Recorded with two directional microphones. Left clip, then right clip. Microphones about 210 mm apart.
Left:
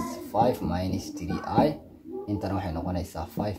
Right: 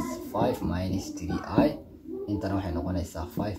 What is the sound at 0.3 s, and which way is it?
Speech, 45° left (ahead or behind).